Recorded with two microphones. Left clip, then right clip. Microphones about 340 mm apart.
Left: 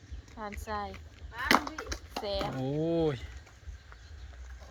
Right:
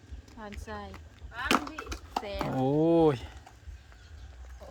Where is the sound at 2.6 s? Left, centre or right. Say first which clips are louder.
Right 8 dB; centre.